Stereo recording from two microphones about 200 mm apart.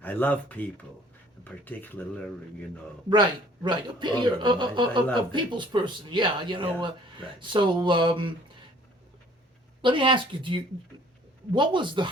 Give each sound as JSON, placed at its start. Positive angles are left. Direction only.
{"t": 0.0, "sound": "speech", "side_deg": 10}
{"t": 3.1, "sound": "a man's voice", "side_deg": -25}
{"t": 9.8, "sound": "a man's voice", "side_deg": -25}